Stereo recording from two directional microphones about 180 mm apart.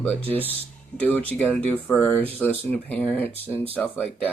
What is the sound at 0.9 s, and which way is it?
Speech, 5° left (ahead or behind).